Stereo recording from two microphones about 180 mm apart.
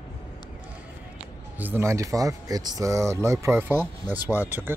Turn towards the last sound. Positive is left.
turn(degrees=-10)  # may be behind; listen again after turning